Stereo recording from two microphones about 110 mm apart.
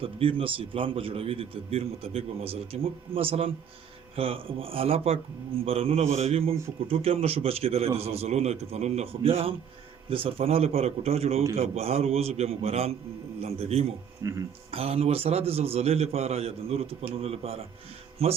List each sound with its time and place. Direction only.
0.0 s a man's voice: 55° right (ahead or behind)
14.2 s speech: 30° right (ahead or behind)
14.7 s a man's voice: 60° right (ahead or behind)